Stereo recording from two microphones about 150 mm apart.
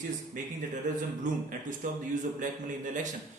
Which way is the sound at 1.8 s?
65° right (ahead or behind).